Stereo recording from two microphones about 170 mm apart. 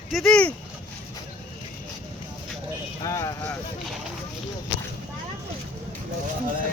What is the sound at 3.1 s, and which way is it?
Clip-clop, 20° left (ahead or behind).